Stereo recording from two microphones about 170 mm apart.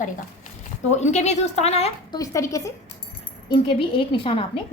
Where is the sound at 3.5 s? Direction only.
30° left (ahead or behind).